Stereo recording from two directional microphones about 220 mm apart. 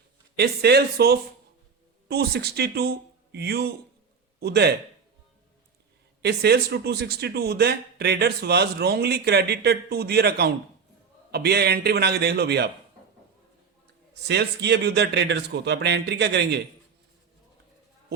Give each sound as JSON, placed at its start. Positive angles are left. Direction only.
{"t": 0.3, "sound": "a man's voice", "side_deg": -45}
{"t": 6.2, "sound": "speech", "side_deg": -50}
{"t": 14.1, "sound": "speech", "side_deg": -50}